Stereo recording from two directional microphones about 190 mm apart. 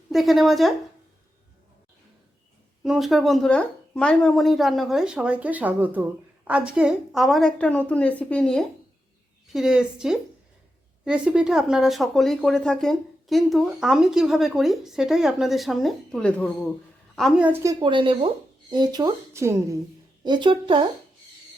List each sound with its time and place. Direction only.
0.1 s speech: centre (ahead or behind)
2.8 s a woman's voice: centre (ahead or behind); by 20.8 s 25° right (ahead or behind)